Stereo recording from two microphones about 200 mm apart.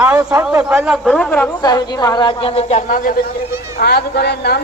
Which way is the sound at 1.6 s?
20° left (ahead or behind).